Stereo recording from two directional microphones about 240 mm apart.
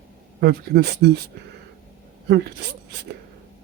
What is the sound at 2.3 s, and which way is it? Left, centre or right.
Speech, right.